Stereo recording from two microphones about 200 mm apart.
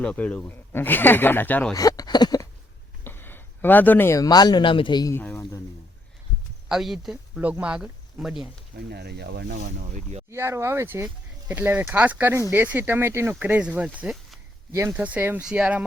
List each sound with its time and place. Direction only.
0.0 s speech: 5° left (ahead or behind)
6.7 s speech: centre (ahead or behind)
8.8 s speech: 55° right (ahead or behind)
10.2 s speech: 15° right (ahead or behind)
14.7 s speech: 15° right (ahead or behind)